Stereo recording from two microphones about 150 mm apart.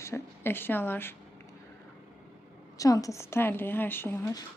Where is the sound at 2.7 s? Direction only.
25° left (ahead or behind).